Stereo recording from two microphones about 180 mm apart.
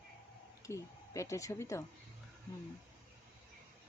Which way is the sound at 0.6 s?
15° left (ahead or behind).